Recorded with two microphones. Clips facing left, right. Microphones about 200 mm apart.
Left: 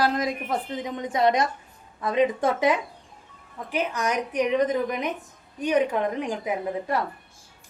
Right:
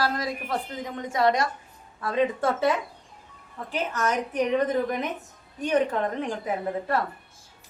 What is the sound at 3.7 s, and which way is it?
A woman's voice, 15° left (ahead or behind).